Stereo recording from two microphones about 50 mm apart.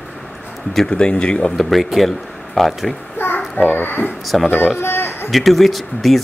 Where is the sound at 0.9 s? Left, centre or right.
Centre.